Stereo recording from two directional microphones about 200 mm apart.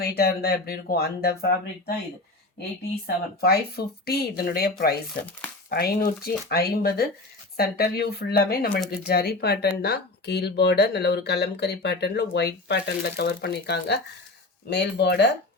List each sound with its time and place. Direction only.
0.0 s speech: 50° left (ahead or behind)
3.4 s speech: 50° left (ahead or behind)